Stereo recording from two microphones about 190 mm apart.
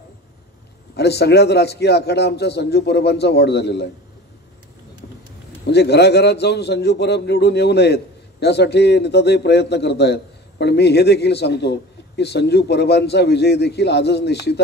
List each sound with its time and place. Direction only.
0.9 s a man's voice: 60° left (ahead or behind)
5.7 s a man's voice: 60° left (ahead or behind)